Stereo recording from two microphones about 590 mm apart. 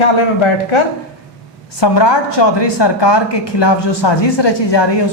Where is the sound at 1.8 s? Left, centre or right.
Left.